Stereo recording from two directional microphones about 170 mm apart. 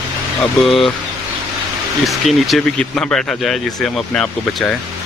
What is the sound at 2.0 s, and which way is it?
Speech, centre (ahead or behind).